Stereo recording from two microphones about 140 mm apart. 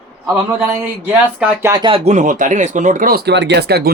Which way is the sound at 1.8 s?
45° right (ahead or behind).